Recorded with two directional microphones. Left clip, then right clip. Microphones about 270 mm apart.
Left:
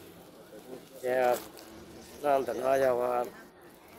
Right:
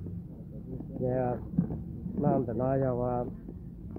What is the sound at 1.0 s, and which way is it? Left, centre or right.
Speech, centre.